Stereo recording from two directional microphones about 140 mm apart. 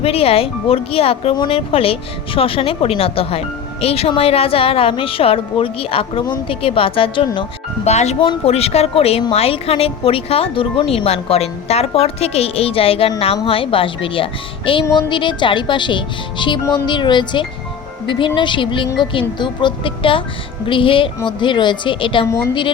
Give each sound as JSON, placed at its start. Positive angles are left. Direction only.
{"t": 0.0, "sound": "speech", "side_deg": 45}
{"t": 7.9, "sound": "speech", "side_deg": 50}
{"t": 22.3, "sound": "a woman's voice", "side_deg": 20}